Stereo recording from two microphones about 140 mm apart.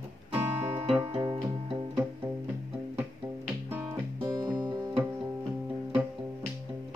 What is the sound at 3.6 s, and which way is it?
Music, 15° right (ahead or behind).